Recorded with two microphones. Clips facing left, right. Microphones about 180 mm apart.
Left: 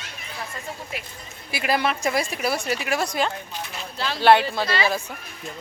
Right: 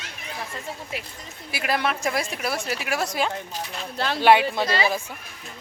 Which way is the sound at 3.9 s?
55° right (ahead or behind).